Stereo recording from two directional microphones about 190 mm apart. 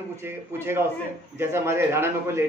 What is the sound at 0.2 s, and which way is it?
A man's voice, 15° right (ahead or behind).